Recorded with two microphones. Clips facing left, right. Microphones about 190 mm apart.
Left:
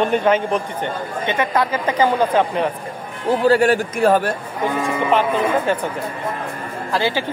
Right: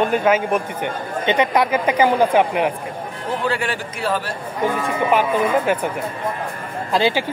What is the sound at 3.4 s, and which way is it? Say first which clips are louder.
Speech: left 11 dB; 40° left (ahead or behind).